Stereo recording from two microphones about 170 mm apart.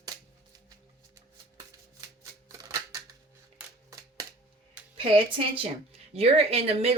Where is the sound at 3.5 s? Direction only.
20° right (ahead or behind).